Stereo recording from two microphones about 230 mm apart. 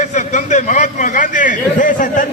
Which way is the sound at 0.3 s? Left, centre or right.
Left.